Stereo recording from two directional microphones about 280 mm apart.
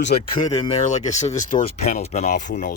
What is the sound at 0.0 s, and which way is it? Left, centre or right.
Speech, centre.